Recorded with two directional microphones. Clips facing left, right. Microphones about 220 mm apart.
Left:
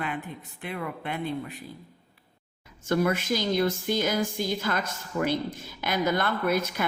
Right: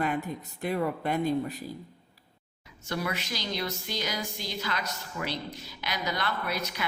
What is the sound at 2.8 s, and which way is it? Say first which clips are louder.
A woman's voice: left 8 dB; 50° left (ahead or behind).